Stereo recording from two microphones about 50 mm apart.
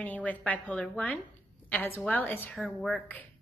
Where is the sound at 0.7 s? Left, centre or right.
Left.